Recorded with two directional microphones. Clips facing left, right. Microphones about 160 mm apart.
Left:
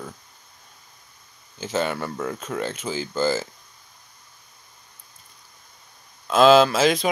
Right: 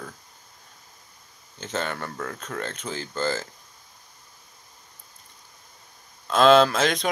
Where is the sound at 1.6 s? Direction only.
10° left (ahead or behind).